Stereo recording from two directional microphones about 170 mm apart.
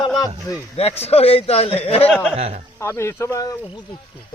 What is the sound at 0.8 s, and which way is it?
A man's voice, 35° left (ahead or behind).